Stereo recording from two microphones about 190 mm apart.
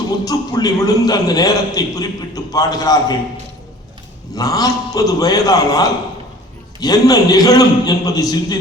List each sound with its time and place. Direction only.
0.3 s a man's voice: 20° left (ahead or behind)
4.4 s a man's voice: 20° left (ahead or behind)